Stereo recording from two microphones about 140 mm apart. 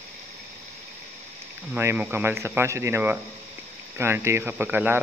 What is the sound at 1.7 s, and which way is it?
Speech, 15° right (ahead or behind).